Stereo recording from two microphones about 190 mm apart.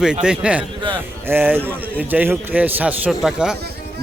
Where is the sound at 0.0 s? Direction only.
5° right (ahead or behind).